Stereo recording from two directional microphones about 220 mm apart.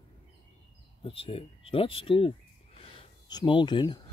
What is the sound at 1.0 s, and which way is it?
Speech, 25° left (ahead or behind).